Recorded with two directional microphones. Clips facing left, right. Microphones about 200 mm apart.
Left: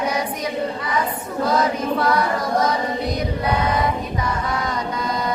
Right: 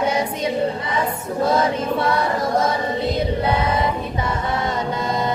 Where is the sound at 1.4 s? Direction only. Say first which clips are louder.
Right 1 dB; 25° right (ahead or behind).